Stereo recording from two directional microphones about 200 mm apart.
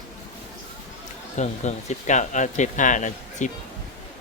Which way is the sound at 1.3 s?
35° left (ahead or behind).